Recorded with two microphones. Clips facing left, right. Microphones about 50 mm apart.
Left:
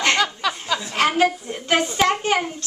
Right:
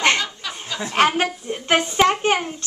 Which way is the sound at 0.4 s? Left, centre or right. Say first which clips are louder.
Left 8 dB; left.